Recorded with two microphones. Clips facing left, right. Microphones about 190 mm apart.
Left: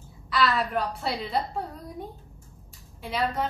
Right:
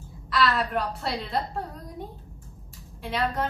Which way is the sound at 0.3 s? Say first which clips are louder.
Even; centre (ahead or behind).